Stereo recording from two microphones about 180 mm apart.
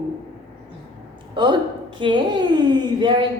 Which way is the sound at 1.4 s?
25° right (ahead or behind).